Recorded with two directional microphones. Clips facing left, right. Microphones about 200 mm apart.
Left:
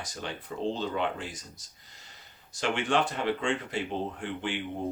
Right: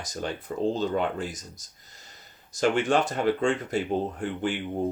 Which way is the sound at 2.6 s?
40° right (ahead or behind).